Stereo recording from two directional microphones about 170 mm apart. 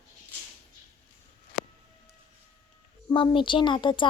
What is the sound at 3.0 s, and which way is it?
Speech, 30° left (ahead or behind).